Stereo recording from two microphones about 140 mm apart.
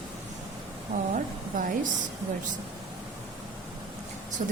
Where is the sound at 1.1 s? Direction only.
70° right (ahead or behind).